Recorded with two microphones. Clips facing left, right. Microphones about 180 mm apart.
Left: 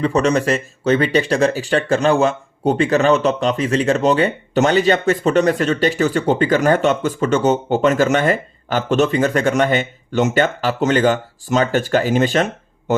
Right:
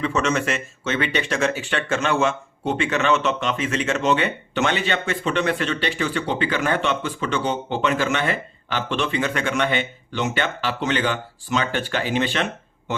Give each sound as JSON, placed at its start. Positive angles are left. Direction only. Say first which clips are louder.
{"t": 0.0, "sound": "speech", "louder": "left 6 dB", "side_deg": 35}